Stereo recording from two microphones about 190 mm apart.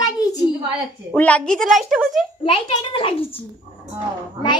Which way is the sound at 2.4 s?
30° left (ahead or behind).